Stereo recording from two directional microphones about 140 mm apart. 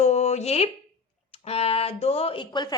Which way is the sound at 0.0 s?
55° left (ahead or behind).